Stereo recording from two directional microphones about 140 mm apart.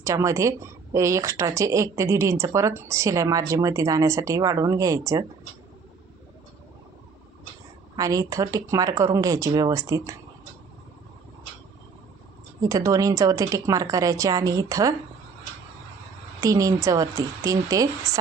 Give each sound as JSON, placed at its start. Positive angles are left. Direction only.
{"t": 0.0, "sound": "a woman's voice", "side_deg": -20}
{"t": 7.9, "sound": "a woman's voice", "side_deg": -25}
{"t": 12.6, "sound": "a woman's voice", "side_deg": -25}
{"t": 16.4, "sound": "a woman's voice", "side_deg": -25}